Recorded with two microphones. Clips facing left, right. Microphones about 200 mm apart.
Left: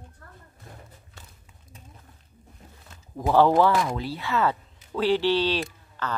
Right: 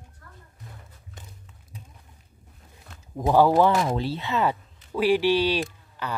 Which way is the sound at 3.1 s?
15° right (ahead or behind).